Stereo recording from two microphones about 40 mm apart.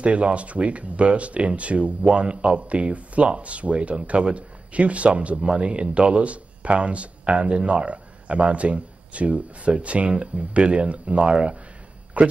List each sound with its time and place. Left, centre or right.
0.0 s speech: right